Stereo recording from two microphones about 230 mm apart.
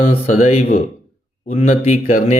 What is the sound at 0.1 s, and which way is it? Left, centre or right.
Speech, left.